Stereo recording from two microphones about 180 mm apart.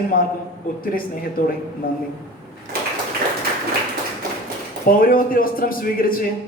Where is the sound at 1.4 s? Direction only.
50° left (ahead or behind).